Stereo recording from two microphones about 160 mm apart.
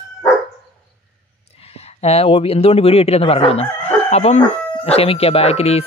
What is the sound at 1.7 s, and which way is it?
Speech, 40° left (ahead or behind).